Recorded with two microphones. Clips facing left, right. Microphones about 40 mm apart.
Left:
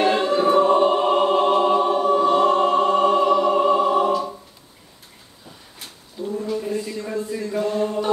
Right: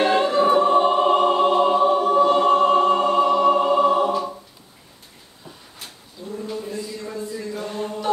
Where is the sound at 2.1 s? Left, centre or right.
Centre.